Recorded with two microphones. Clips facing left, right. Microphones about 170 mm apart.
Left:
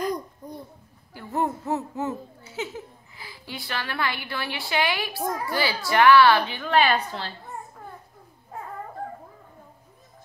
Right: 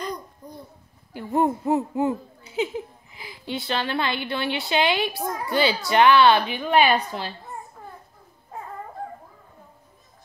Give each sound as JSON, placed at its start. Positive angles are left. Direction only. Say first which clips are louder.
{"t": 1.1, "sound": "speech", "louder": "right 5 dB", "side_deg": -20}
{"t": 5.2, "sound": "a child's voice", "louder": "left 1 dB", "side_deg": 0}
{"t": 5.5, "sound": "a woman's voice", "louder": "right 7 dB", "side_deg": -20}